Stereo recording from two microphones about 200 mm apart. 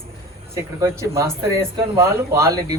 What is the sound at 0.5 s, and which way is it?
Speech, 15° right (ahead or behind).